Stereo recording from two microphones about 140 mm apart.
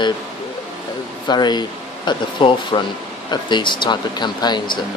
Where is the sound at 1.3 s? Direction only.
30° left (ahead or behind).